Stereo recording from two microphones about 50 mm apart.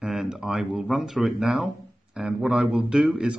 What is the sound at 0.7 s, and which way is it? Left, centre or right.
Speech, centre.